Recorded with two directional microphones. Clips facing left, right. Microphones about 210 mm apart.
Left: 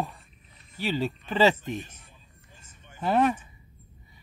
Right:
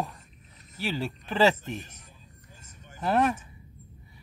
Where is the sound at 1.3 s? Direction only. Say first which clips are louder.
Even; centre (ahead or behind).